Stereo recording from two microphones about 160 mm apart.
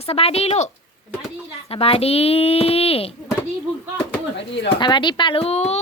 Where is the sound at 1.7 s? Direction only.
35° left (ahead or behind).